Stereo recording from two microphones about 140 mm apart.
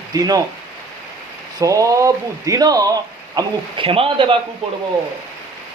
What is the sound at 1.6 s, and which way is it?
Speech, 25° right (ahead or behind).